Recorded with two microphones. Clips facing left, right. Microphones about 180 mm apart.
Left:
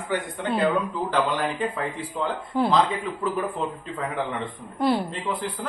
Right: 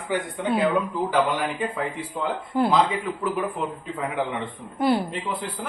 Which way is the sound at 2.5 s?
Centre (ahead or behind).